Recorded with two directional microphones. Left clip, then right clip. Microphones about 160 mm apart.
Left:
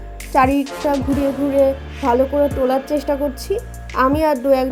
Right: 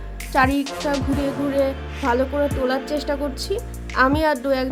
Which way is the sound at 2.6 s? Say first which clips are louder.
Left 4 dB; 20° left (ahead or behind).